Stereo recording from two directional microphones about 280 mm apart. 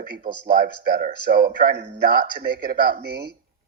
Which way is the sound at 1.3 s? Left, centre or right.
Right.